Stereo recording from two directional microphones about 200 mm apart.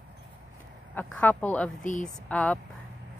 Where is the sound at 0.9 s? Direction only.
10° left (ahead or behind).